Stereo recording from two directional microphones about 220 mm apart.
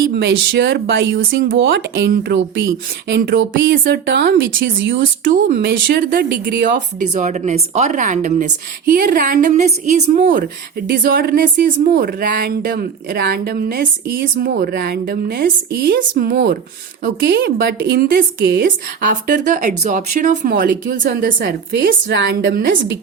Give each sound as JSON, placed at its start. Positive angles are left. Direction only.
{"t": 0.0, "sound": "a woman's voice", "side_deg": -55}
{"t": 5.2, "sound": "a woman's voice", "side_deg": -40}
{"t": 7.1, "sound": "a woman's voice", "side_deg": -35}